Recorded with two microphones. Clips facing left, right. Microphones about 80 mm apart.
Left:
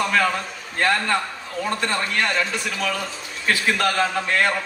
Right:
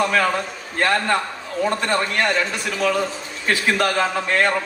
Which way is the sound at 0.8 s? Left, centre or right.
Centre.